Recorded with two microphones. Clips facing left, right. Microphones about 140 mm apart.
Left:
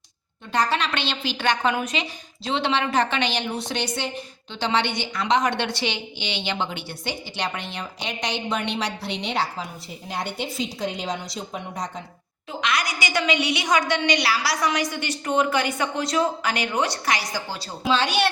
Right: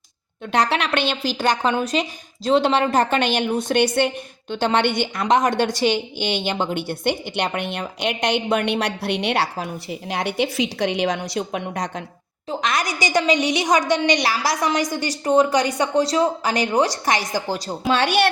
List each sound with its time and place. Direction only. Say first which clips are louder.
0.5 s a woman's voice: right 3 dB; 70° right (ahead or behind)
12.5 s a woman's voice: right 2 dB; 45° right (ahead or behind)